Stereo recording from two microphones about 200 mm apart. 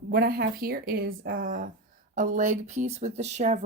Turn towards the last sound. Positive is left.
turn(degrees=-35)  # may be behind; listen again after turning